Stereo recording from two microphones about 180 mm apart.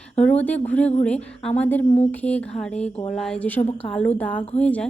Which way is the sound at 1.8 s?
35° left (ahead or behind).